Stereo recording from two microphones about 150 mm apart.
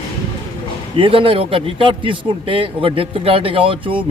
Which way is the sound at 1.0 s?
35° right (ahead or behind).